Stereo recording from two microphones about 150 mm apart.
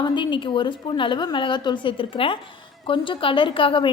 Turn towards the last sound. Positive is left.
turn(degrees=35)  # may be behind; listen again after turning